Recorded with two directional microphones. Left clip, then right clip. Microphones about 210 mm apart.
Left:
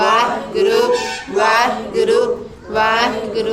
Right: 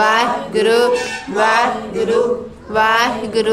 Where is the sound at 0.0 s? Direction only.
25° right (ahead or behind).